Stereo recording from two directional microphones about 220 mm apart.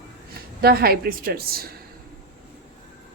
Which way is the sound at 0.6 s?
45° right (ahead or behind).